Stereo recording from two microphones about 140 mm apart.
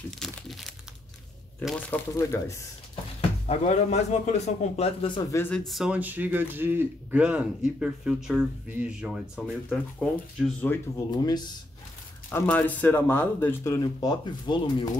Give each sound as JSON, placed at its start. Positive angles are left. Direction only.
{"t": 0.2, "sound": "crumpling", "side_deg": 0}
{"t": 1.9, "sound": "speech", "side_deg": 20}
{"t": 3.2, "sound": "speech", "side_deg": 50}
{"t": 5.3, "sound": "speech", "side_deg": 15}
{"t": 5.7, "sound": "a man's voice", "side_deg": -5}
{"t": 11.1, "sound": "speech", "side_deg": 30}
{"t": 12.3, "sound": "speech", "side_deg": 15}
{"t": 13.7, "sound": "speech", "side_deg": 30}